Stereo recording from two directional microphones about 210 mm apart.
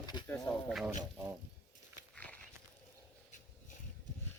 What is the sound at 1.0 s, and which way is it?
Insect, 15° right (ahead or behind).